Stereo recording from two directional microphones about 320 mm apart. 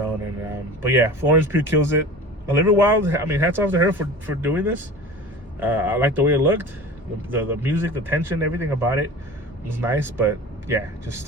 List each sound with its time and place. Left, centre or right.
0.8 s a man's voice: centre